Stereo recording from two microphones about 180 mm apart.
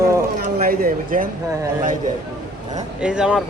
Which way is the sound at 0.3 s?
55° right (ahead or behind).